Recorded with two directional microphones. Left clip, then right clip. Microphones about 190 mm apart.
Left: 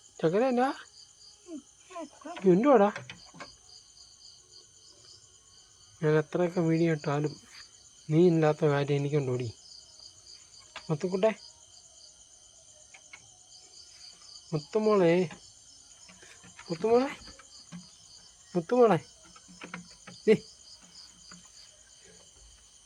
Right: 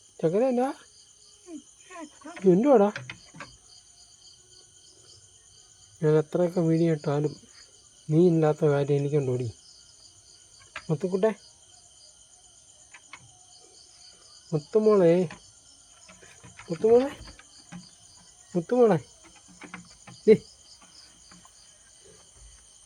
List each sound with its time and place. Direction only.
0.2 s speech: 10° right (ahead or behind)
2.5 s speech: 15° right (ahead or behind)
6.0 s speech: 15° right (ahead or behind)
10.8 s speech: 10° right (ahead or behind)
14.5 s speech: 15° right (ahead or behind)
16.8 s speech: 15° right (ahead or behind)
18.5 s speech: 15° right (ahead or behind)